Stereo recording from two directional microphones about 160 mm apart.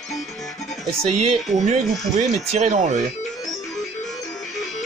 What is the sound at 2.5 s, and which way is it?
Speech, 45° right (ahead or behind).